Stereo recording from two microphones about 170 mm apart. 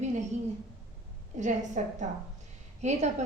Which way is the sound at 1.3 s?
45° right (ahead or behind).